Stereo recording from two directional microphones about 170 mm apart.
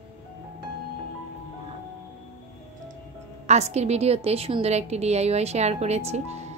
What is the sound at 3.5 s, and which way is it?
A woman's voice, 40° right (ahead or behind).